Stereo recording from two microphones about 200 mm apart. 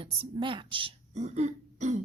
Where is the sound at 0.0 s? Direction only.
25° right (ahead or behind).